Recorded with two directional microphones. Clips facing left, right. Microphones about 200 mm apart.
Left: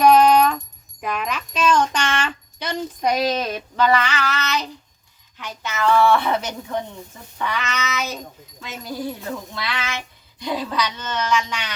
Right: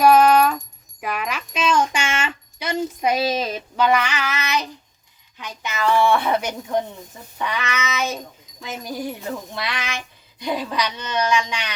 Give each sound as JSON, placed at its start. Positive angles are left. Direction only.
{"t": 0.0, "sound": "a sound", "side_deg": -5}
{"t": 1.0, "sound": "wind chime", "side_deg": -5}
{"t": 5.4, "sound": "a woman's voice", "side_deg": -15}